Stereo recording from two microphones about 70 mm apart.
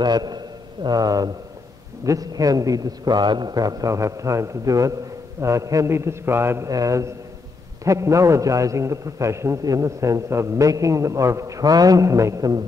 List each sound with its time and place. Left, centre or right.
0.0 s a man's voice: right
0.8 s a man's voice: right
6.7 s a man's voice: right
9.6 s a man's voice: right